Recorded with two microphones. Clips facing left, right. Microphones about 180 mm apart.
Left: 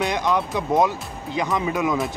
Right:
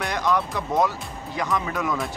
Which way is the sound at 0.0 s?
20° left (ahead or behind).